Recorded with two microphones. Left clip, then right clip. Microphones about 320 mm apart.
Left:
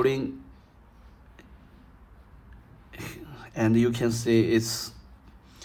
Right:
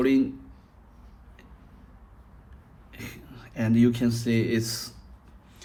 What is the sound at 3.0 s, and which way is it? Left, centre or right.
Speech, centre.